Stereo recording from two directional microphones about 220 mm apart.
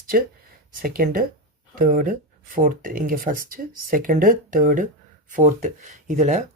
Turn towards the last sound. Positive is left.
turn(degrees=-35)  # may be behind; listen again after turning